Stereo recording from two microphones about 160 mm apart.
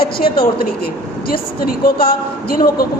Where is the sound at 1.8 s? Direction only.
65° left (ahead or behind).